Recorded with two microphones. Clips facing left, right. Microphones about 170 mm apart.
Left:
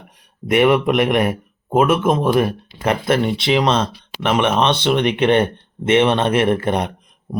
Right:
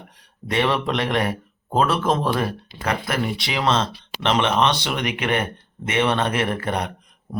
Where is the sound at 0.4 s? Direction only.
20° left (ahead or behind).